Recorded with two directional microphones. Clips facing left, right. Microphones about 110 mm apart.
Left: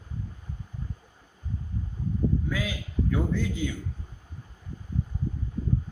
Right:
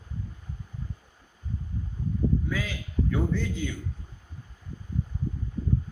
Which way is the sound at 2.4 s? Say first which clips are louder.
Left 1 dB; 5° left (ahead or behind).